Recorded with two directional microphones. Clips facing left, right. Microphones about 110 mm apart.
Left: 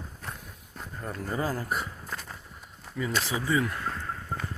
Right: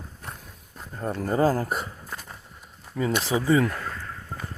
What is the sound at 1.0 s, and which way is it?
Speech, 35° right (ahead or behind).